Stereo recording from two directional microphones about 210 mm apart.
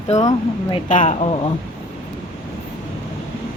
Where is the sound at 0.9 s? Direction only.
35° left (ahead or behind).